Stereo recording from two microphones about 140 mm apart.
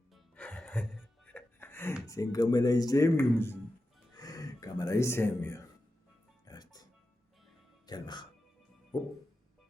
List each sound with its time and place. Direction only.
0.3 s music: 10° left (ahead or behind)
2.0 s speech: 25° left (ahead or behind)
4.2 s gasp: 25° left (ahead or behind)
6.4 s music: 30° left (ahead or behind)
7.9 s speech: 30° left (ahead or behind)